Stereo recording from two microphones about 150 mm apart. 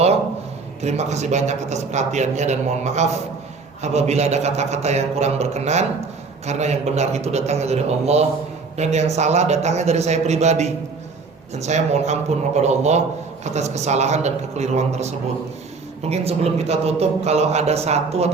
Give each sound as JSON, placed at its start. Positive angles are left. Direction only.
{"t": 0.8, "sound": "a man's voice", "side_deg": -50}